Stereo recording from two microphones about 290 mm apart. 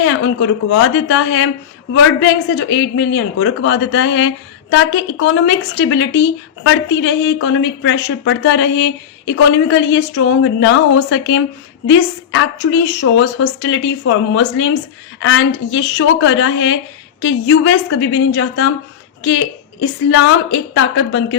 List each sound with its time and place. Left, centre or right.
0.0 s a woman's voice: left